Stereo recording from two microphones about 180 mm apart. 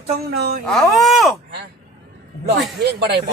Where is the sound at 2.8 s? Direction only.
65° right (ahead or behind).